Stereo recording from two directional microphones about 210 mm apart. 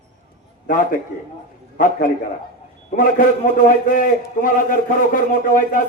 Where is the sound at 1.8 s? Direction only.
40° left (ahead or behind).